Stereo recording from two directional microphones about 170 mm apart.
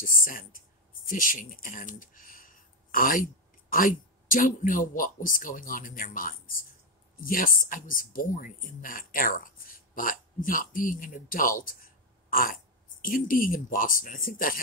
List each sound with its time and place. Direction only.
0.0 s speech: 55° left (ahead or behind)